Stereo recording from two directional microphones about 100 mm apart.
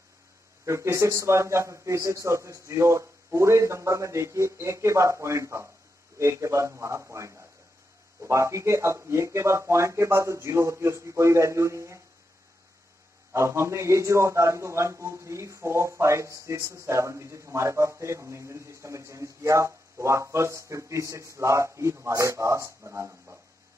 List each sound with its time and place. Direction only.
0.7 s a man's voice: 30° right (ahead or behind)
13.3 s a man's voice: 30° right (ahead or behind)